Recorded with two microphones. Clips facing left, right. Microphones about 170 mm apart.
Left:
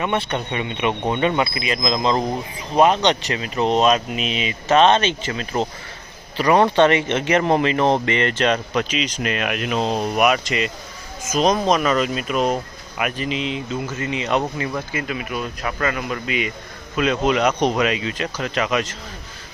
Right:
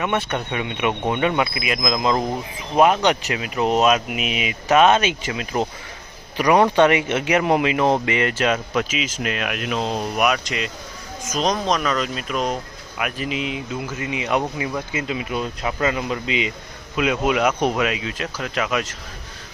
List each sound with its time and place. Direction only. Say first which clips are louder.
0.0 s speech: even; 5° right (ahead or behind)
14.9 s speech: right 1 dB; 20° right (ahead or behind)
17.0 s speech: left 1 dB; 10° right (ahead or behind)